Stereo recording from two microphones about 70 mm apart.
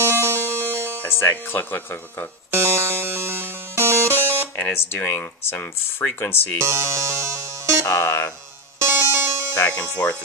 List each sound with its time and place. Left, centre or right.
0.0 s music: right
1.0 s speech: left
2.5 s music: right
4.5 s speech: left
6.6 s speech: right
7.9 s speech: left
8.8 s music: right